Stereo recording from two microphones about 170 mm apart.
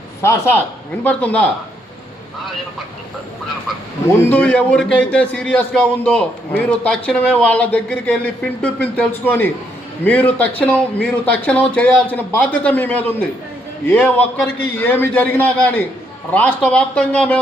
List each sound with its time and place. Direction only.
0.2 s a man's voice: 15° left (ahead or behind)
4.3 s a man's voice: 10° left (ahead or behind)